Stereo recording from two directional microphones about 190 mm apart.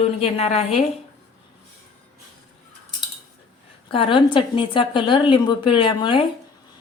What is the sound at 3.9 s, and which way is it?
A woman's voice, 25° left (ahead or behind).